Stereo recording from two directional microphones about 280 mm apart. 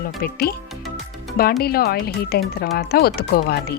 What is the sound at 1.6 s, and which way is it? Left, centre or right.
Speech, left.